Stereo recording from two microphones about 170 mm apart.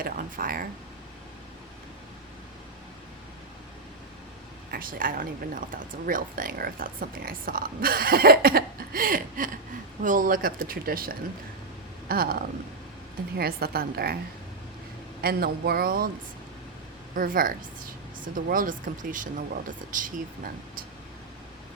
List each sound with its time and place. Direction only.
0.0 s speech: 55° right (ahead or behind)
4.7 s speech: 55° right (ahead or behind)
15.2 s speech: 65° right (ahead or behind)
17.2 s speech: 55° right (ahead or behind)